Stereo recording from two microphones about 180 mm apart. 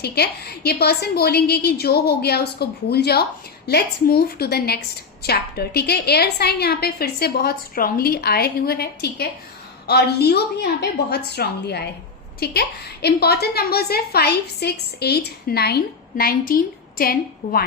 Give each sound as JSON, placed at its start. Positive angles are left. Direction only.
{"t": 0.0, "sound": "a woman's voice", "side_deg": 60}